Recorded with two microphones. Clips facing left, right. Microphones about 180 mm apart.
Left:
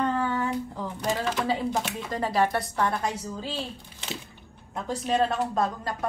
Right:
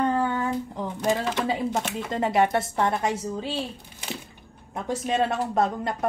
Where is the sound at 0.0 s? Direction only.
15° right (ahead or behind).